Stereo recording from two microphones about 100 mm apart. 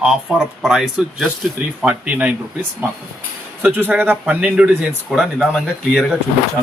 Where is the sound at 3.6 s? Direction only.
20° right (ahead or behind).